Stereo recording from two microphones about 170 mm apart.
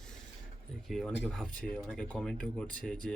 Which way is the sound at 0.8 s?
Centre (ahead or behind).